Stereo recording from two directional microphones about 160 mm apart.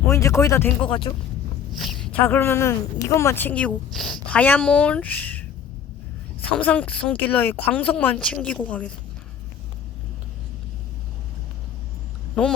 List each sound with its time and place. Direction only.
0.1 s a woman's voice: 20° left (ahead or behind)
0.9 s speech: 30° left (ahead or behind)
1.7 s a woman's voice: centre (ahead or behind)